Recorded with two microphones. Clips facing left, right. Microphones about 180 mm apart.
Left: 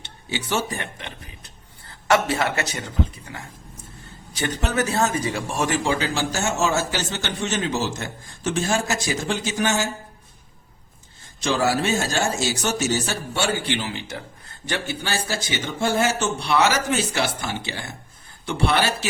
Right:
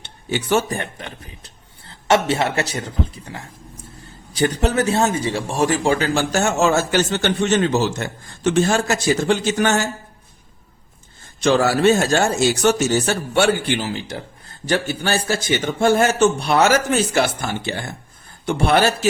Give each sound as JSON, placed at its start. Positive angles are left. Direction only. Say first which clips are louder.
{"t": 0.0, "sound": "speech", "louder": "right 6 dB", "side_deg": -55}
{"t": 2.0, "sound": "a man's voice", "louder": "right 3 dB", "side_deg": -25}
{"t": 11.3, "sound": "speech", "louder": "right 5 dB", "side_deg": -65}
{"t": 13.8, "sound": "a man's voice", "louder": "right 5 dB", "side_deg": -35}
{"t": 14.8, "sound": "speech", "louder": "right 6 dB", "side_deg": -50}